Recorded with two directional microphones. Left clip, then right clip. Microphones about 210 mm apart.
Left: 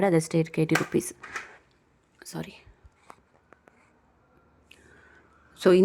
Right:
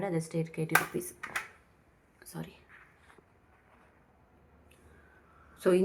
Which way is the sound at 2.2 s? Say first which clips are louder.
Left 7 dB; 50° left (ahead or behind).